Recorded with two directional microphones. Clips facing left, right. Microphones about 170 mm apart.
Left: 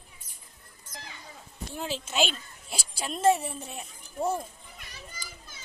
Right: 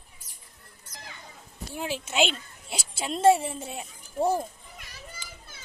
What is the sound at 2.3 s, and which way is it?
Speech, 25° right (ahead or behind).